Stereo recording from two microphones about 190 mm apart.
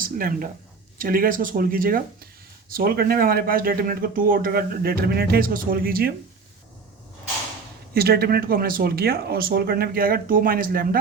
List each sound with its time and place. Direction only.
0.0 s a man's voice: 50° right (ahead or behind)
7.9 s a man's voice: 55° right (ahead or behind)